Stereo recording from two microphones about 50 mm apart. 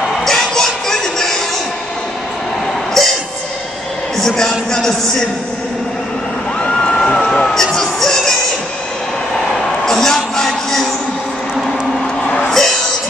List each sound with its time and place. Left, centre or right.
0.2 s music: centre
3.0 s music: centre
4.2 s a man's voice: centre
6.6 s a sound: left
7.2 s music: centre
9.8 s a sound: centre
12.4 s music: centre